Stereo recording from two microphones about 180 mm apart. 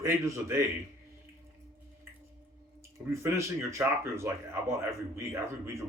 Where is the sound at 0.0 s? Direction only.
15° right (ahead or behind).